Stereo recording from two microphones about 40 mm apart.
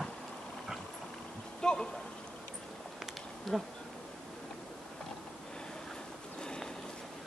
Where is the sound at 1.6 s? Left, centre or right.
Centre.